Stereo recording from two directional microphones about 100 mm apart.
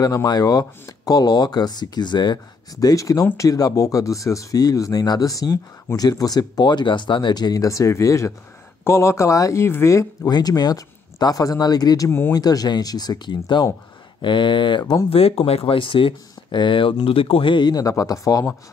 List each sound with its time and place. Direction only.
0.0 s speech: 40° left (ahead or behind)
10.3 s speech: 40° left (ahead or behind)
12.1 s speech: 25° left (ahead or behind)
12.4 s speech: 40° left (ahead or behind)
15.0 s speech: 75° left (ahead or behind); by 18.4 s 35° left (ahead or behind)